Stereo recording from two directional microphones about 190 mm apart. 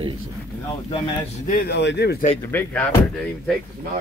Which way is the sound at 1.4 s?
50° left (ahead or behind).